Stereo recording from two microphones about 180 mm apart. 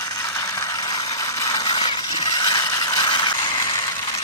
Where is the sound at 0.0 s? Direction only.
20° left (ahead or behind).